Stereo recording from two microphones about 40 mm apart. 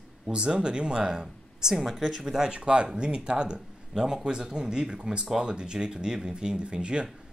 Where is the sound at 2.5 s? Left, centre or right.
Right.